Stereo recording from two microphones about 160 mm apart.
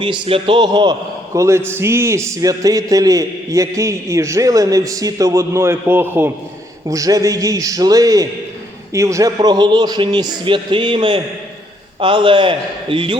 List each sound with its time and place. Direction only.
0.0 s a man's voice: 35° right (ahead or behind)